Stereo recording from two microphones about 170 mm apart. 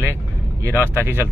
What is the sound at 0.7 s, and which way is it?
Speech, 15° right (ahead or behind).